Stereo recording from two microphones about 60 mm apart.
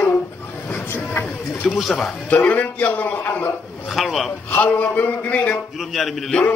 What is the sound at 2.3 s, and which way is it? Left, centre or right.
Speech, left.